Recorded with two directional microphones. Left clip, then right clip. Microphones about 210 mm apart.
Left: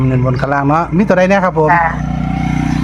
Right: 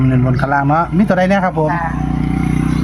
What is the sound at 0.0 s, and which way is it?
Speech, 10° left (ahead or behind).